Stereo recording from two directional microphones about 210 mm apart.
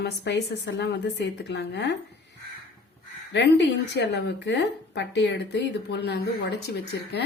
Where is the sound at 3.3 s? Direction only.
55° left (ahead or behind).